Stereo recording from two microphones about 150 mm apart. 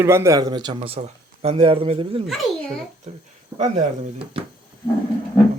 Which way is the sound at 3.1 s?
45° right (ahead or behind).